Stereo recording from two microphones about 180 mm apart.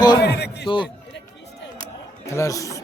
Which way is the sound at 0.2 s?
65° left (ahead or behind).